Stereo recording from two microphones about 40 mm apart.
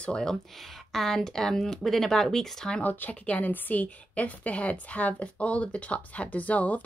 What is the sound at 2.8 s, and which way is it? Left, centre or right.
Speech, left.